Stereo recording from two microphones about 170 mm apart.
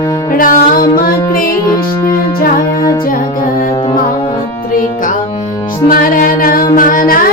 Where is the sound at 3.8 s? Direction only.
30° left (ahead or behind).